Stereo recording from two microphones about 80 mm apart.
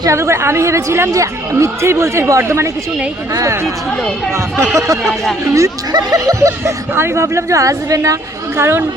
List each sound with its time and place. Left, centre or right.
0.0 s speech: right
4.7 s speech: right
5.9 s speech: right
6.9 s speech: right